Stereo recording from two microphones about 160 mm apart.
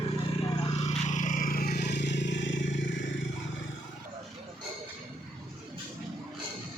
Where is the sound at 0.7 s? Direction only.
45° left (ahead or behind); by 3.0 s 90° left.